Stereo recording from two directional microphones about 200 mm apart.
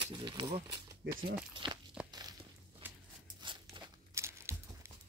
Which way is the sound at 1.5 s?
25° right (ahead or behind).